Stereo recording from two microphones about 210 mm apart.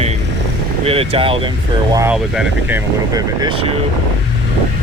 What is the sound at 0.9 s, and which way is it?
Speech, 25° right (ahead or behind).